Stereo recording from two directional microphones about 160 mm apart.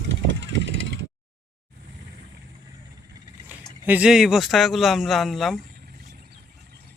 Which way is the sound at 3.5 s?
10° right (ahead or behind).